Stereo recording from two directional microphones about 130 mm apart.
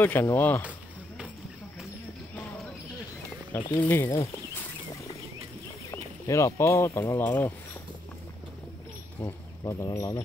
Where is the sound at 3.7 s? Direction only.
15° left (ahead or behind).